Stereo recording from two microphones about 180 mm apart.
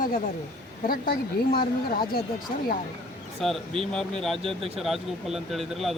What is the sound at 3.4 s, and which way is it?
Speech, centre (ahead or behind).